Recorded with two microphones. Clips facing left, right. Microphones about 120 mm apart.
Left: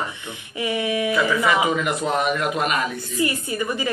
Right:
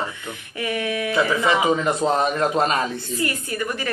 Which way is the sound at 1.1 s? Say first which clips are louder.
Right 2 dB; 25° right (ahead or behind).